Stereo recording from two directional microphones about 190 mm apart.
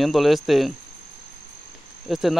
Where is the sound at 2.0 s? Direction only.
Centre (ahead or behind).